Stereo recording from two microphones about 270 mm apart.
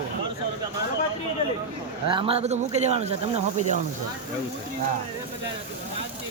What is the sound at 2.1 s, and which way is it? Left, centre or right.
Speech, centre.